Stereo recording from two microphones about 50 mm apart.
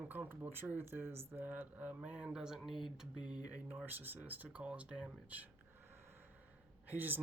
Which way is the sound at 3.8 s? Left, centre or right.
Right.